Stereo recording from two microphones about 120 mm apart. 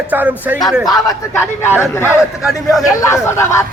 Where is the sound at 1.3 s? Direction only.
20° left (ahead or behind).